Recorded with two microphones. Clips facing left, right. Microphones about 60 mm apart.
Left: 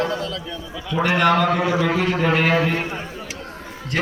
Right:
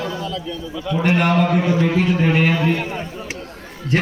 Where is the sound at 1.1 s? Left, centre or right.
Left.